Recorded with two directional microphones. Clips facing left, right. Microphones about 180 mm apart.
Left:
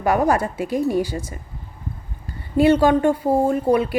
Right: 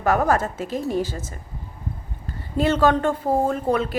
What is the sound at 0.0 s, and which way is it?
A woman's voice, 15° left (ahead or behind).